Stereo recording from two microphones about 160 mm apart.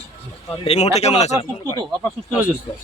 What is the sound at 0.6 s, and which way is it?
Speech, 40° left (ahead or behind).